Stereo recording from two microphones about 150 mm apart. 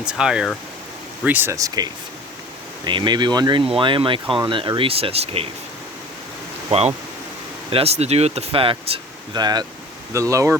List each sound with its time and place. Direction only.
0.1 s speech: 5° right (ahead or behind); by 5.5 s 40° right (ahead or behind)
6.7 s speech: 40° right (ahead or behind); by 10.6 s 20° right (ahead or behind)